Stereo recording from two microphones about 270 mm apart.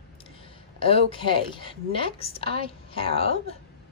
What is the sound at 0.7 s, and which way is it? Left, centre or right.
A woman's voice, centre.